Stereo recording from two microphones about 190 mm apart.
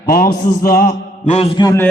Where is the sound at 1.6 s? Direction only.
20° left (ahead or behind).